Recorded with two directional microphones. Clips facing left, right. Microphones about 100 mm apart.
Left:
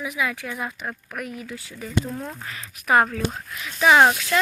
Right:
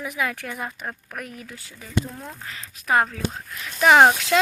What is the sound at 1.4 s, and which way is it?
Speech, 35° right (ahead or behind).